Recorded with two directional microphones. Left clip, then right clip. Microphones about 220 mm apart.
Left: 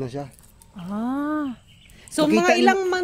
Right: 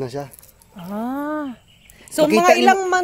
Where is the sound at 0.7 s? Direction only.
5° right (ahead or behind).